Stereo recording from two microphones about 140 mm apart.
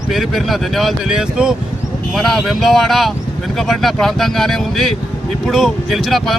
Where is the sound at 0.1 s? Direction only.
Centre (ahead or behind).